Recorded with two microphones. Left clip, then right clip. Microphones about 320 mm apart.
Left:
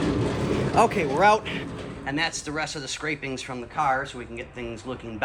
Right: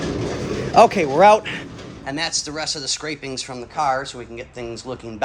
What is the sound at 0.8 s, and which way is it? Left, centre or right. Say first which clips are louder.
Speech: right 8 dB; right.